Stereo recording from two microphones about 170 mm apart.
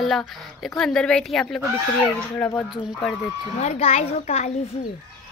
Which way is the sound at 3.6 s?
40° left (ahead or behind).